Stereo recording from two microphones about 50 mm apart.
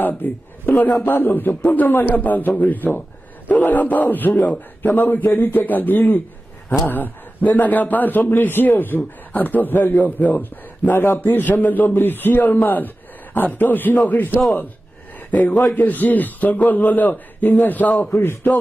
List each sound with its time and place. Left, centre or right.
0.0 s a man's voice: left
15.7 s a man's voice: left